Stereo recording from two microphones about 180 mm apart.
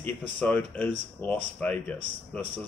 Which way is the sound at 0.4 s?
10° left (ahead or behind).